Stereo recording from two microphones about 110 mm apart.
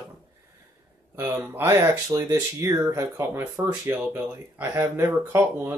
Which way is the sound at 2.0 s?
35° right (ahead or behind).